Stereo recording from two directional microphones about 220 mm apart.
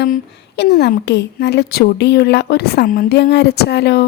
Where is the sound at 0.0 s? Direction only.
50° left (ahead or behind).